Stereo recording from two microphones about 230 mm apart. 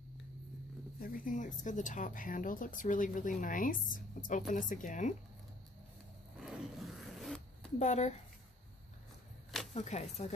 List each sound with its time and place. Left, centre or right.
1.0 s speech: left
6.4 s zipper: centre
7.8 s speech: left
9.8 s speech: left